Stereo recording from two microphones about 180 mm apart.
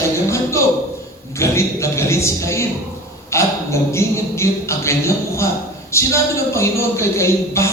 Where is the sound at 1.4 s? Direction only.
15° left (ahead or behind).